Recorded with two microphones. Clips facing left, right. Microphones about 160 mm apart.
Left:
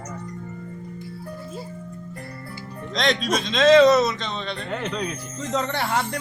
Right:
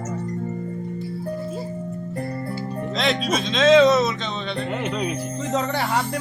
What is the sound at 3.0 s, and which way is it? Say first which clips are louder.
Speech: left 1 dB; 5° right (ahead or behind).